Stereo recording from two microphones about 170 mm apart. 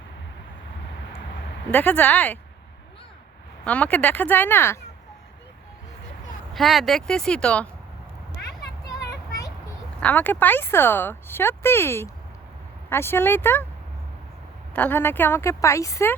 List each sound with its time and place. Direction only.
1.7 s speech: 10° left (ahead or behind)
3.6 s speech: 5° left (ahead or behind)
6.5 s speech: centre (ahead or behind)
10.0 s speech: 10° left (ahead or behind)
14.7 s speech: 10° left (ahead or behind)